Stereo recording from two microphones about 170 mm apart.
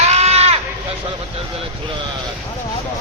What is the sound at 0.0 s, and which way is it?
Sheep, 40° right (ahead or behind).